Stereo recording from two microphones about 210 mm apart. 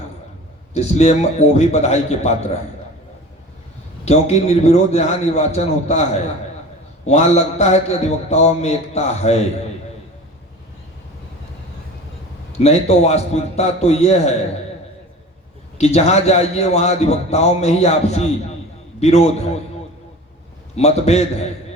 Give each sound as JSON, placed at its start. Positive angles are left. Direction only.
{"t": 0.7, "sound": "a man's voice", "side_deg": 30}
{"t": 4.0, "sound": "a man's voice", "side_deg": 30}
{"t": 7.0, "sound": "a man's voice", "side_deg": 30}
{"t": 12.5, "sound": "a man's voice", "side_deg": 30}
{"t": 15.8, "sound": "a man's voice", "side_deg": 30}
{"t": 20.7, "sound": "a man's voice", "side_deg": 30}